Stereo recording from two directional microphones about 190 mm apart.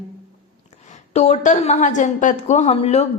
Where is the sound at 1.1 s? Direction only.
35° left (ahead or behind).